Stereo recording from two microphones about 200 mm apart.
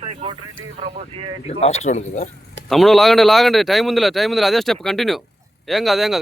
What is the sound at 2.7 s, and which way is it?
Speech, centre (ahead or behind).